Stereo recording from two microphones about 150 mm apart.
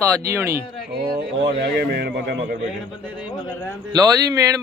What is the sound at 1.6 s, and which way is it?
Speech, 90° right.